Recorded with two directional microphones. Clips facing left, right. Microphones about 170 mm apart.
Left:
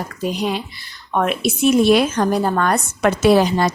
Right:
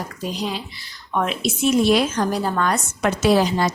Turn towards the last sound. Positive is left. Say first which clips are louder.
# left 3 dB
turn(degrees=60)  # may be behind; listen again after turning